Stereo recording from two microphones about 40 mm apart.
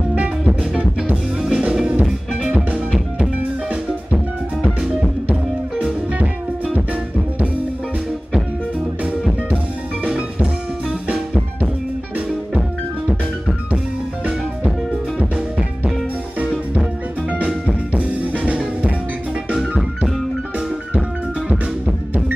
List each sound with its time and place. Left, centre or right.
1.4 s music: right
6.7 s music: right
10.0 s music: right
17.6 s music: right
21.5 s music: right